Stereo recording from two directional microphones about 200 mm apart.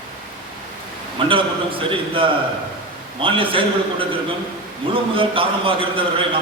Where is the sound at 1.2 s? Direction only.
25° right (ahead or behind).